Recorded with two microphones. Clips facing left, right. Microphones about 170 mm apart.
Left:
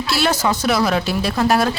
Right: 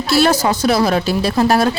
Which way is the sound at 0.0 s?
40° right (ahead or behind).